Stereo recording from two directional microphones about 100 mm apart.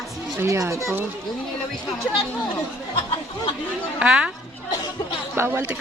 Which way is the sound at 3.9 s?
10° right (ahead or behind).